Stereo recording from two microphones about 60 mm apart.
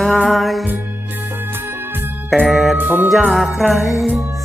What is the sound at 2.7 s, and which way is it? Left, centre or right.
Music, right.